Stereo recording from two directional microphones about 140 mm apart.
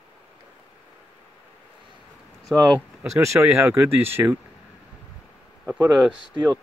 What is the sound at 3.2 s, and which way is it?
Speech, 20° right (ahead or behind).